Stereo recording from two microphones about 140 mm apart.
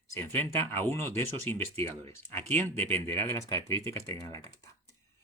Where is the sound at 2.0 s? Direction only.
45° right (ahead or behind).